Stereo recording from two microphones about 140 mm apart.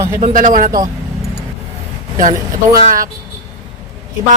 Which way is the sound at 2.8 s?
75° right (ahead or behind).